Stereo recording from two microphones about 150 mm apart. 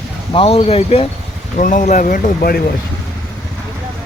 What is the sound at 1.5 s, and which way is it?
Speech, 60° left (ahead or behind).